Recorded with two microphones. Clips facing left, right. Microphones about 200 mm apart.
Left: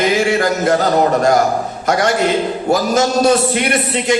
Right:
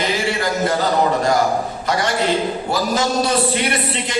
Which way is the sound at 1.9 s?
45° left (ahead or behind).